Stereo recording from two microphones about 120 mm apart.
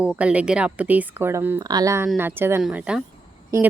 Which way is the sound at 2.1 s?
20° right (ahead or behind).